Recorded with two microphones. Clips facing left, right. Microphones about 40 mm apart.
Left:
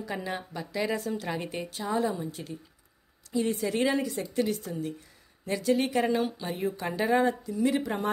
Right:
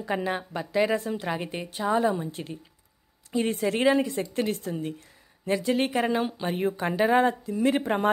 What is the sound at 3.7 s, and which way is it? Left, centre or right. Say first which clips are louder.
Speech: right 4 dB; right.